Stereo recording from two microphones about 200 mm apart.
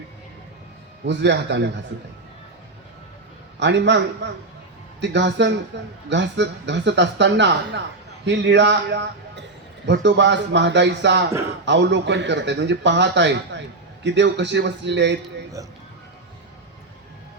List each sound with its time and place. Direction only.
1.0 s speech: 60° right (ahead or behind)
3.6 s speech: 60° right (ahead or behind)
15.6 s speech: 15° right (ahead or behind)